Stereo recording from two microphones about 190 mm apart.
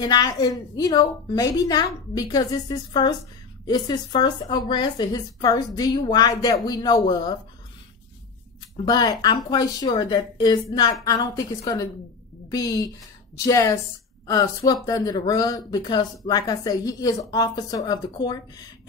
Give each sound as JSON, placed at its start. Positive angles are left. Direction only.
{"t": 0.0, "sound": "a woman's voice", "side_deg": 20}
{"t": 8.8, "sound": "a woman's voice", "side_deg": 20}